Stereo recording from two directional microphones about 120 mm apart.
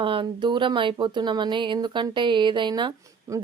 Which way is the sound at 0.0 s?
45° right (ahead or behind).